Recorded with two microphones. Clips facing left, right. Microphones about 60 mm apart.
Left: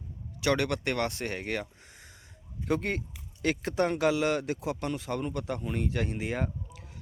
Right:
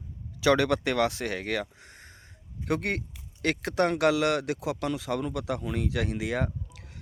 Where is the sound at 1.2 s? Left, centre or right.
Right.